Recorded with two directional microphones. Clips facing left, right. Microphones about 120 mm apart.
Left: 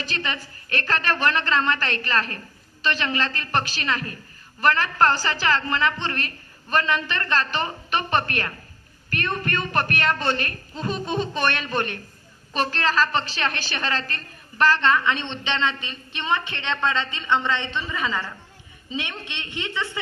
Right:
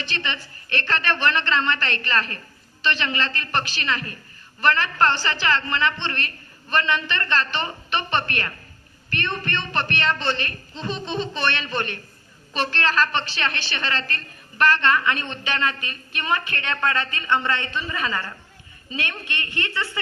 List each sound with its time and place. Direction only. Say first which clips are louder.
0.0 s a woman's voice: even; 40° left (ahead or behind)
10.8 s a sound: left 2 dB; 5° left (ahead or behind)
11.3 s speech: left 1 dB; 45° left (ahead or behind)
11.6 s a sound: left 2 dB; 5° left (ahead or behind)
13.1 s a woman's voice: left 1 dB; 40° left (ahead or behind)
14.2 s a woman's voice: left 1 dB; centre (ahead or behind)
15.1 s a man's voice: left 1 dB; 25° left (ahead or behind)
17.9 s a sound: even; 15° left (ahead or behind)
18.9 s a man's voice: right 1 dB; 20° left (ahead or behind)